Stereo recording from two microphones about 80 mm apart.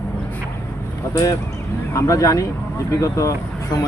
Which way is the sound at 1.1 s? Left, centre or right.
Left.